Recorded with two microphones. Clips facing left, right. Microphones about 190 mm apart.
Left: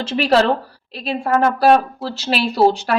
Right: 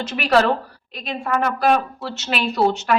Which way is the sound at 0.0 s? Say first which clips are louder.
Left 2 dB; 30° left (ahead or behind).